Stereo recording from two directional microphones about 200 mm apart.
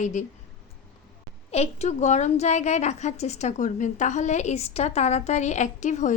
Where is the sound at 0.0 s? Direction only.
40° left (ahead or behind).